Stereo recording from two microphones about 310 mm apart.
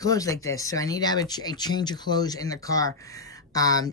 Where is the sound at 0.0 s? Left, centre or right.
Centre.